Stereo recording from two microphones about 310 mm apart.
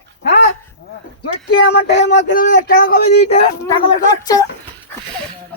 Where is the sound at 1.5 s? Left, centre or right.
Left.